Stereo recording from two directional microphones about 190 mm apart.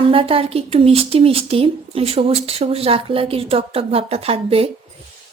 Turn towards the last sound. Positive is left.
turn(degrees=-30)  # may be behind; listen again after turning